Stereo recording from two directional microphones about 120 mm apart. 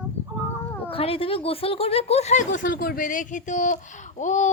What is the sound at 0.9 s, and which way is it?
Speech, 50° left (ahead or behind).